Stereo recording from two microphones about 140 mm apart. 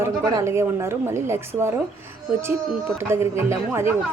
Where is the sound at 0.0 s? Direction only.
20° right (ahead or behind).